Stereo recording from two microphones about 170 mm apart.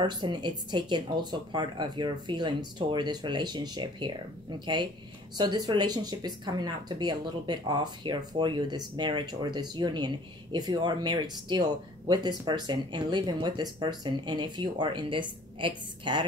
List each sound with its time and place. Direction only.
0.0 s speech: 25° right (ahead or behind)